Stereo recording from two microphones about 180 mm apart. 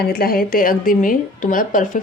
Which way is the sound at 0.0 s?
55° left (ahead or behind).